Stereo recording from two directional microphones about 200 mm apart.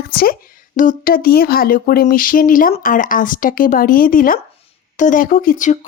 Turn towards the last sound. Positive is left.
turn(degrees=35)  # may be behind; listen again after turning